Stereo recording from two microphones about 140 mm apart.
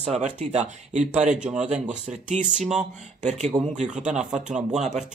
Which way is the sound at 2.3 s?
60° right (ahead or behind).